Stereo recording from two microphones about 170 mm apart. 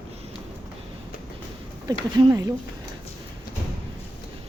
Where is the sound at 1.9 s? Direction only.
20° right (ahead or behind).